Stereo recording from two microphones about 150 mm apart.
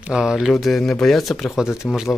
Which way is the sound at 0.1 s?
5° right (ahead or behind).